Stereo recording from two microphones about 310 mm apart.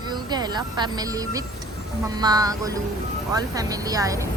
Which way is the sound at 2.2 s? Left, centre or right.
Centre.